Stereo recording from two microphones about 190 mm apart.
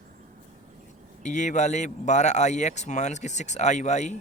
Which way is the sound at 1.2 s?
40° left (ahead or behind).